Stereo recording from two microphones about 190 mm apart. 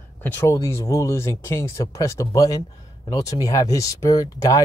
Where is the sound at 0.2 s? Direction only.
10° left (ahead or behind).